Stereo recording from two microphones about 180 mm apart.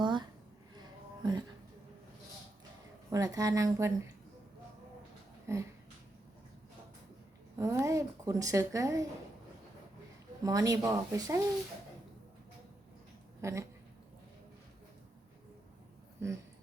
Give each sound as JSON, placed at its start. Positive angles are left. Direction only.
{"t": 0.0, "sound": "a sound", "side_deg": -25}
{"t": 3.1, "sound": "speech", "side_deg": -20}
{"t": 5.5, "sound": "a sound", "side_deg": -15}
{"t": 7.6, "sound": "a woman's voice", "side_deg": -15}
{"t": 10.4, "sound": "speech", "side_deg": -20}
{"t": 13.4, "sound": "a woman's voice", "side_deg": -15}